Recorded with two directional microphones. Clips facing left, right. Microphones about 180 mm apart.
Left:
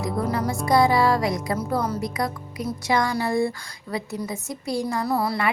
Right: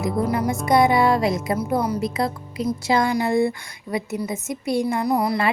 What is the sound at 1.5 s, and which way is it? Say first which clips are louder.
Speech: right 3 dB; 15° right (ahead or behind).